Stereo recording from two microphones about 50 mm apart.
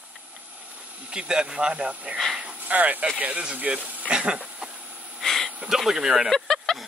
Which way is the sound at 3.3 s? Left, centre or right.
Centre.